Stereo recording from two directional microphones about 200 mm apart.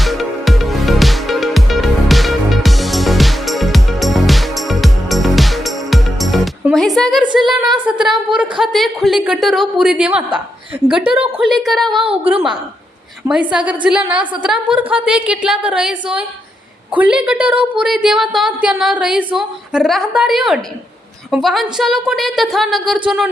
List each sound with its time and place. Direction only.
0.0 s music: centre (ahead or behind)
7.3 s a sound: centre (ahead or behind)
7.9 s a woman's voice: 5° right (ahead or behind)
12.0 s a woman's voice: 25° right (ahead or behind)
13.2 s a woman's voice: 5° right (ahead or behind)